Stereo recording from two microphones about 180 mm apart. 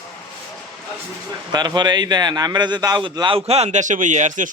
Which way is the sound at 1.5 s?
25° right (ahead or behind).